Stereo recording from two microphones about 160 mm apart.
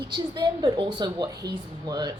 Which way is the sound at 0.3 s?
25° right (ahead or behind).